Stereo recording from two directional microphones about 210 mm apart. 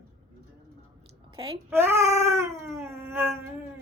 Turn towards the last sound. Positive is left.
turn(degrees=-10)  # may be behind; listen again after turning